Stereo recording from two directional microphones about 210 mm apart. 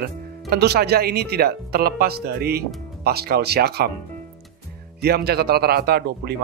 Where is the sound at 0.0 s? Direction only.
50° right (ahead or behind).